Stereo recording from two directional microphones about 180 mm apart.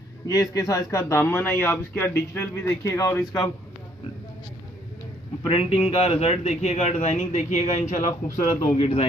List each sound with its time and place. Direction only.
0.3 s a man's voice: 20° left (ahead or behind)
5.4 s speech: 35° left (ahead or behind)